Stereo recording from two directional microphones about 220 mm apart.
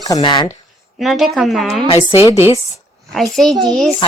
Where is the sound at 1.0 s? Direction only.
Centre (ahead or behind).